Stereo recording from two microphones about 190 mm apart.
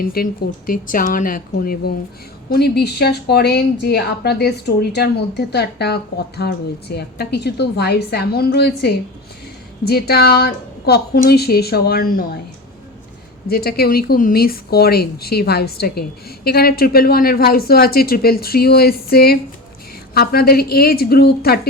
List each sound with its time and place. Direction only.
0.0 s a woman's voice: 50° left (ahead or behind)
13.5 s a woman's voice: 55° left (ahead or behind)